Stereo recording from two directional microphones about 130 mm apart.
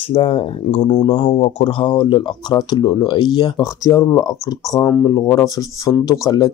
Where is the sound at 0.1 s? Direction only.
45° left (ahead or behind).